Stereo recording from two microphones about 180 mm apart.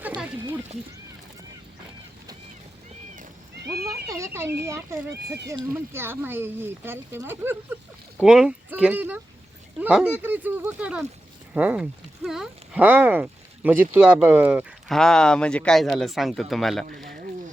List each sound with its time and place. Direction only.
4.1 s speech: 15° right (ahead or behind); by 17.2 s centre (ahead or behind)